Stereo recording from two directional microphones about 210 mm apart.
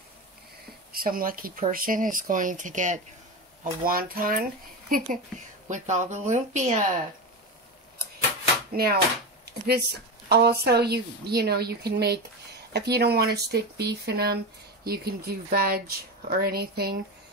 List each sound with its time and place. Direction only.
0.9 s speech: 45° right (ahead or behind)
8.7 s speech: 50° right (ahead or behind)